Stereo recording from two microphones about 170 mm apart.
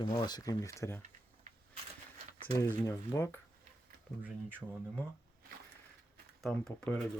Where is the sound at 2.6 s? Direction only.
15° left (ahead or behind).